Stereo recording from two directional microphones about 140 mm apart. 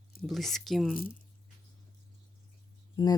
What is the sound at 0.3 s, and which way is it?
Speech, centre (ahead or behind).